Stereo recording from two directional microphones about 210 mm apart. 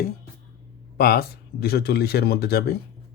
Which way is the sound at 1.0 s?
45° left (ahead or behind).